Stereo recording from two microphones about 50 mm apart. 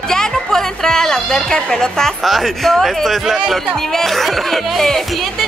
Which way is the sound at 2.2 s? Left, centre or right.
Centre.